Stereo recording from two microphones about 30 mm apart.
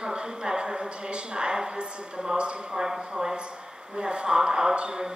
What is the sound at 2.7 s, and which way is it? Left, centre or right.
Speech, centre.